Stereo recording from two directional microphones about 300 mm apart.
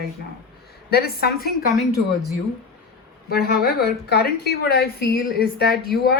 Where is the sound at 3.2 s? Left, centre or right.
Left.